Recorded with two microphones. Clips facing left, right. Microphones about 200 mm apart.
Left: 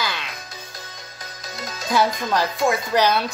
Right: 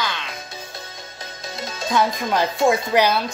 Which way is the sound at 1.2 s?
25° right (ahead or behind).